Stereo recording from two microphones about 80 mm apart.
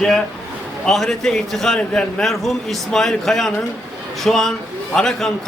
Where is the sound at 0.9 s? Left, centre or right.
Centre.